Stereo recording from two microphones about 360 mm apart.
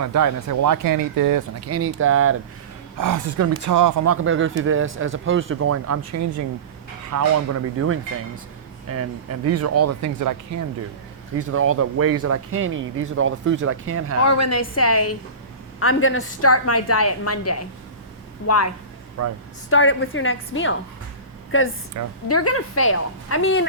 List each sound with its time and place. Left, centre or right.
0.0 s speech: right
1.6 s speech: right
3.0 s speech: right
4.0 s speech: right
11.3 s speech: right
14.3 s a woman's voice: left
19.2 s speech: right
19.7 s a woman's voice: left
22.0 s speech: right
22.3 s a woman's voice: left